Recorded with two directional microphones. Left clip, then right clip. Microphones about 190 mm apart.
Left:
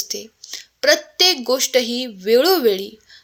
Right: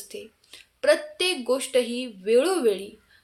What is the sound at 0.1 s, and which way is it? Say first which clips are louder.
A woman's voice: left 10 dB; 40° left (ahead or behind).